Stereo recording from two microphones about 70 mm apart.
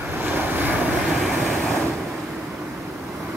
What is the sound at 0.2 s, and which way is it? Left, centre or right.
Waves, right.